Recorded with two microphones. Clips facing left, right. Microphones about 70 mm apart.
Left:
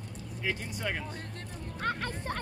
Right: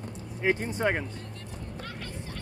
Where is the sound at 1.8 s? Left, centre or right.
Left.